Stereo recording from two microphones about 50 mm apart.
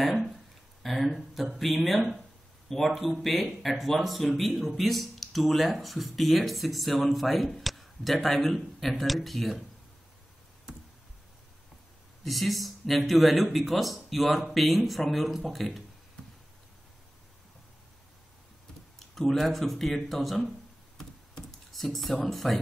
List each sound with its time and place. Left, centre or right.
0.8 s speech: centre
12.3 s speech: centre
16.2 s a sound: left
18.9 s speech: centre
21.0 s a sound: centre
22.2 s speech: centre